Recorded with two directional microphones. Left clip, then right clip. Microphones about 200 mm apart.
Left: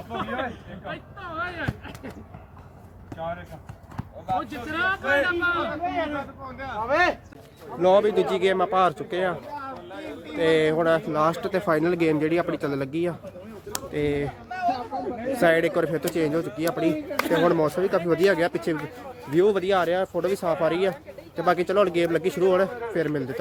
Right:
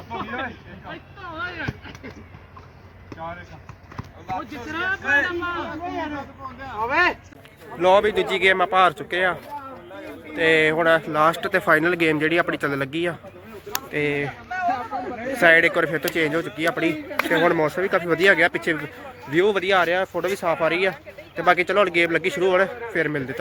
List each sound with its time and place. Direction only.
0.1 s a sound: 15° left (ahead or behind)
0.9 s speech: 15° left (ahead or behind)
4.4 s speech: 15° left (ahead or behind)
6.8 s speech: 60° left (ahead or behind)
7.8 s speech: centre (ahead or behind)
14.7 s chatter: 25° right (ahead or behind)
15.4 s speech: centre (ahead or behind)
16.9 s speech: 50° left (ahead or behind)
17.4 s speech: centre (ahead or behind)